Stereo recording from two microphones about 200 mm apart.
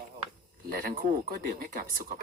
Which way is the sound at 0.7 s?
45° right (ahead or behind).